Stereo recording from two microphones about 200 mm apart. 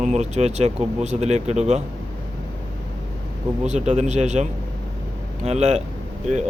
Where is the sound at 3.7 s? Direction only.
35° right (ahead or behind).